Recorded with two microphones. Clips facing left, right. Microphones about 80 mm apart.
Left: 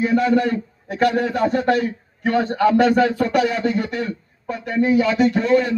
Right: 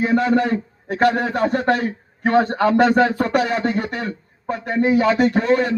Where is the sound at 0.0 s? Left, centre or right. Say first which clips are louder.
Even; right.